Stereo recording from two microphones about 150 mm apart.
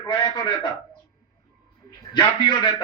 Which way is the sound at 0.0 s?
30° left (ahead or behind).